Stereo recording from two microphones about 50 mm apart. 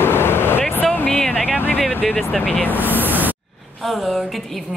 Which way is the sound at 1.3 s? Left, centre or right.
Centre.